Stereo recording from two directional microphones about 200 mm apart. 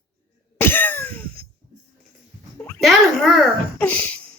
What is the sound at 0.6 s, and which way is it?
Cough, 10° left (ahead or behind).